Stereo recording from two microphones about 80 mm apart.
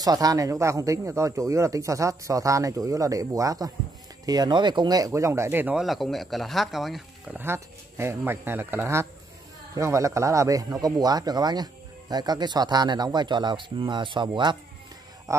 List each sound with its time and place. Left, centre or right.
0.0 s speech: right
4.3 s speech: right
5.8 s speech: centre
7.4 s a man's voice: right
15.3 s a sound: right